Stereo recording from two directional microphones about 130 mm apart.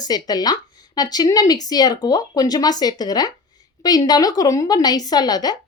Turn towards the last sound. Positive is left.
turn(degrees=30)  # may be behind; listen again after turning